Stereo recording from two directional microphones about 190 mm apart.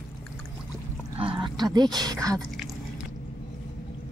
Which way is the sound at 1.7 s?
20° right (ahead or behind).